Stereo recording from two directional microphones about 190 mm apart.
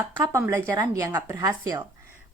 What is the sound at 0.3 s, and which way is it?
Speech, 15° right (ahead or behind).